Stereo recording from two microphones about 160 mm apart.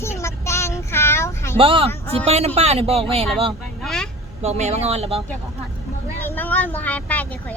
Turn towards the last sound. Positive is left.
turn(degrees=10)  # may be behind; listen again after turning